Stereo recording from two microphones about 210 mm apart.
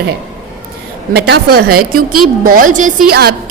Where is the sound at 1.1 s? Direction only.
45° right (ahead or behind).